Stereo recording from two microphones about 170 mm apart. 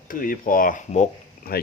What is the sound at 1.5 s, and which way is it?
Speech, 65° left (ahead or behind).